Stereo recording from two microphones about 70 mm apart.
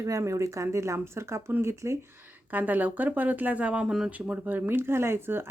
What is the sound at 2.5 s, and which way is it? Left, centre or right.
Speech, right.